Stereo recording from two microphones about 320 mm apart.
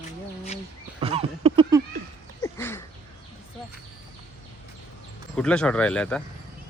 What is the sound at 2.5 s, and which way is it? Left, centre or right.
Bird, centre.